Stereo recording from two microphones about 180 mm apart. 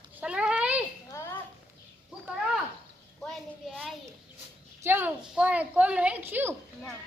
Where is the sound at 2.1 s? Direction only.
5° right (ahead or behind).